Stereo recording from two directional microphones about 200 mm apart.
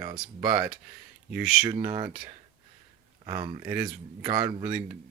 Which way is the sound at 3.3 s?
25° right (ahead or behind).